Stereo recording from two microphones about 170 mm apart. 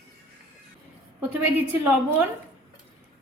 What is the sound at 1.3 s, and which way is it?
Speech, 10° right (ahead or behind).